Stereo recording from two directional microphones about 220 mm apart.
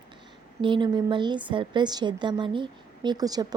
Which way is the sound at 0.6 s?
20° right (ahead or behind).